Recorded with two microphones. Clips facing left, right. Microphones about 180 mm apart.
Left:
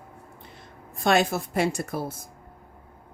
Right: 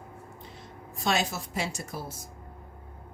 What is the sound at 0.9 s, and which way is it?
Speech, 55° left (ahead or behind).